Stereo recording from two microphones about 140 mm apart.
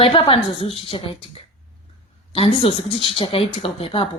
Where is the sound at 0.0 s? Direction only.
40° left (ahead or behind).